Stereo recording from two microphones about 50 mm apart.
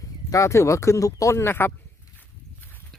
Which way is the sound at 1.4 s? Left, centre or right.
Left.